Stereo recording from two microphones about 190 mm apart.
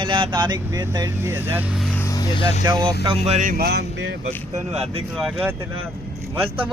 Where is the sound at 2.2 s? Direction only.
25° left (ahead or behind).